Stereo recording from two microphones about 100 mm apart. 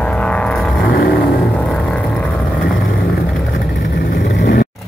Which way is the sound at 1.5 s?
10° left (ahead or behind).